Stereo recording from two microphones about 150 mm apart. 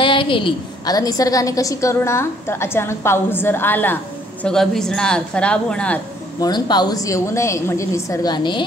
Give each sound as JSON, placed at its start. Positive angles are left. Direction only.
{"t": 0.0, "sound": "a woman's voice", "side_deg": 35}
{"t": 6.4, "sound": "a woman's voice", "side_deg": 30}